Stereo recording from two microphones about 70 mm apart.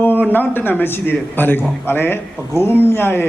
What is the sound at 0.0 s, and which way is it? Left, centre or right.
Speech, left.